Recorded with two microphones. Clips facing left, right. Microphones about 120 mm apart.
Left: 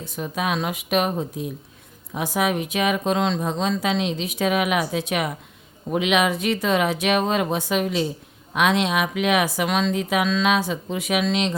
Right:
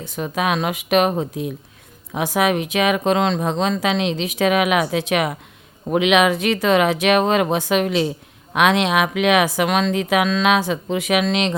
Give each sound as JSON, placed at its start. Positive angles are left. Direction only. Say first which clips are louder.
{"t": 0.0, "sound": "speech", "louder": "right 4 dB", "side_deg": -80}
{"t": 2.1, "sound": "speech", "louder": "right 4 dB", "side_deg": -90}